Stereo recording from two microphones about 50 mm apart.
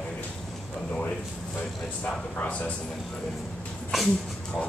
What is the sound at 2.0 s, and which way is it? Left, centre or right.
Speech, left.